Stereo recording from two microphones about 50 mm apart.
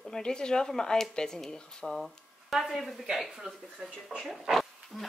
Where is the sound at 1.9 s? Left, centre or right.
Centre.